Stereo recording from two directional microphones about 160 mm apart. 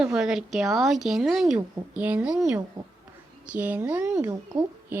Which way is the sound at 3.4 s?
10° right (ahead or behind).